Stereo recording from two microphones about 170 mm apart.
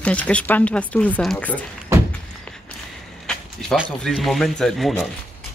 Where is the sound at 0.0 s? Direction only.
10° left (ahead or behind).